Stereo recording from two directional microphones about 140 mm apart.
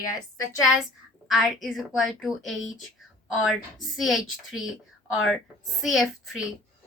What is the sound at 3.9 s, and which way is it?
A woman's voice, centre (ahead or behind).